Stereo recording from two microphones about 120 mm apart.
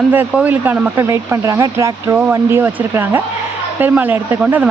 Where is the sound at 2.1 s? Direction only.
15° right (ahead or behind).